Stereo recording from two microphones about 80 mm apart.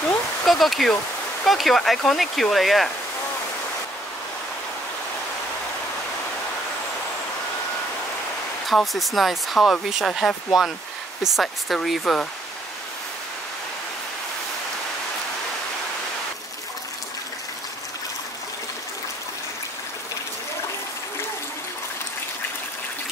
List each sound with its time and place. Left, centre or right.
0.5 s speech: centre
8.6 s speech: centre